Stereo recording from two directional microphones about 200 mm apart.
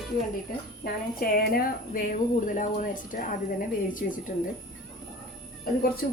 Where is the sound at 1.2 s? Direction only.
50° left (ahead or behind).